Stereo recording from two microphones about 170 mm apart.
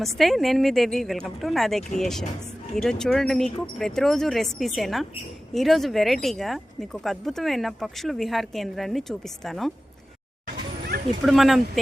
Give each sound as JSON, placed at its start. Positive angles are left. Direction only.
{"t": 0.0, "sound": "speech", "side_deg": 0}
{"t": 10.4, "sound": "a sound", "side_deg": -70}
{"t": 11.2, "sound": "speech", "side_deg": 0}